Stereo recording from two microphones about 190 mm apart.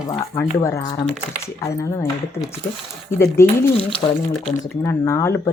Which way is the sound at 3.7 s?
30° left (ahead or behind).